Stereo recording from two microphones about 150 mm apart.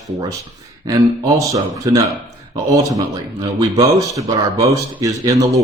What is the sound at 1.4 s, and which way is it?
Speech, 20° right (ahead or behind).